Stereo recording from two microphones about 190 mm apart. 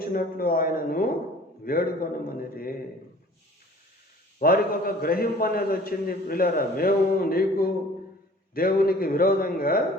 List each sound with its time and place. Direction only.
0.0 s a man's voice: 50° left (ahead or behind)
4.4 s a man's voice: 50° left (ahead or behind)